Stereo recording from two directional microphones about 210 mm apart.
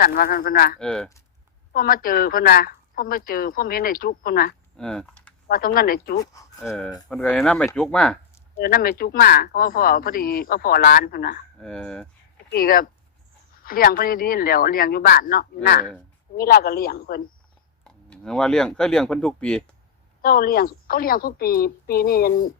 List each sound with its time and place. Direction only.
0.0 s speech: 45° left (ahead or behind)
0.8 s speech: 5° left (ahead or behind)
1.7 s speech: 45° left (ahead or behind)
4.8 s speech: 5° left (ahead or behind)
5.5 s speech: 45° left (ahead or behind)
6.6 s speech: centre (ahead or behind)
8.5 s speech: 45° left (ahead or behind)
11.6 s speech: 5° left (ahead or behind)
12.5 s speech: 45° left (ahead or behind)
17.8 s speech: 5° left (ahead or behind)
20.2 s speech: 45° left (ahead or behind)